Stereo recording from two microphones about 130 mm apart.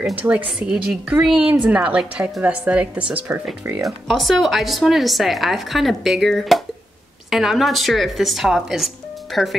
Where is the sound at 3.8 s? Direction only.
Centre (ahead or behind).